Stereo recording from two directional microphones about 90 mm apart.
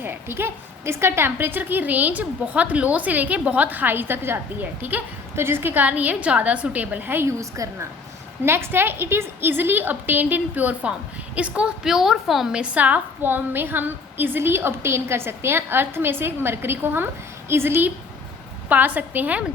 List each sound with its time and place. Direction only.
0.0 s a woman's voice: 25° right (ahead or behind)